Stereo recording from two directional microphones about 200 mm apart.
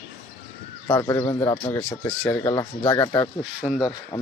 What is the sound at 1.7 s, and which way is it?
A man's voice, 5° left (ahead or behind).